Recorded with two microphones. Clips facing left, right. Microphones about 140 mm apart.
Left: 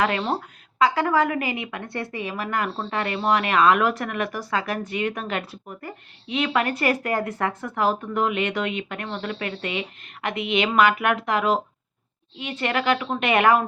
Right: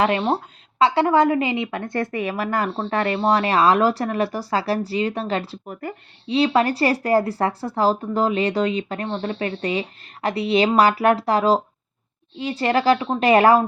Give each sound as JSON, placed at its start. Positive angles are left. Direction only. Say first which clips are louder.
{"t": 0.0, "sound": "speech", "louder": "right 4 dB", "side_deg": -25}